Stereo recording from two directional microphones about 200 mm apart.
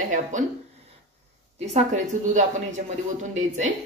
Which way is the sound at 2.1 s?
40° right (ahead or behind).